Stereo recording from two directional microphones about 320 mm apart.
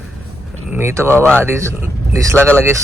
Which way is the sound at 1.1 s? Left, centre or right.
Centre.